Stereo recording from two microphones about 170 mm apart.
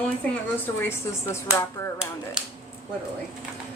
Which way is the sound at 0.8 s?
15° left (ahead or behind).